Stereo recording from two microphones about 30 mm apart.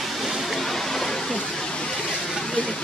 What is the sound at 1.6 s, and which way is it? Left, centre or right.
Vehicle, left.